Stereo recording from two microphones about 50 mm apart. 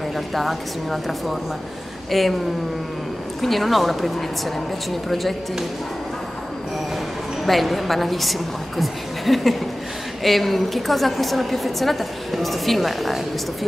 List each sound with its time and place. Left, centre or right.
0.3 s a woman's voice: centre
3.3 s a woman's voice: centre
5.1 s a woman's voice: centre
7.4 s a woman's voice: centre